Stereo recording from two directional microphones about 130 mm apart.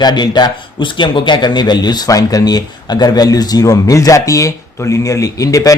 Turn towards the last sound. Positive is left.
turn(degrees=25)  # may be behind; listen again after turning